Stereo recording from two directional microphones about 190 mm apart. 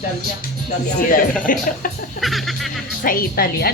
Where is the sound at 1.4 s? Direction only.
45° left (ahead or behind).